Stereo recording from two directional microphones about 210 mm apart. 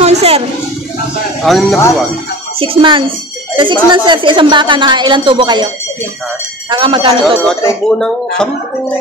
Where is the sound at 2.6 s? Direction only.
25° right (ahead or behind).